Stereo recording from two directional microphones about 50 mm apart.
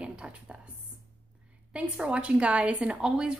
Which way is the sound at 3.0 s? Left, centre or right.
Centre.